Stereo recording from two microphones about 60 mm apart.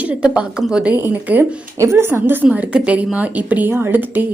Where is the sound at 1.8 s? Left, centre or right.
Right.